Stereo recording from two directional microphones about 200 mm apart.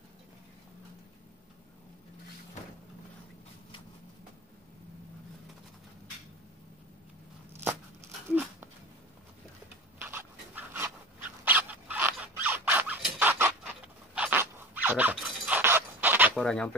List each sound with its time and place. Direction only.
8.3 s a sound: 5° right (ahead or behind)
10.0 s dog: 10° right (ahead or behind)
14.1 s chink: 10° right (ahead or behind)
16.3 s fowl: 5° left (ahead or behind)